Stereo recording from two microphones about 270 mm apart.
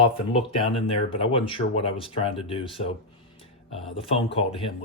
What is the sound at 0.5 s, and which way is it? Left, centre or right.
Speech, left.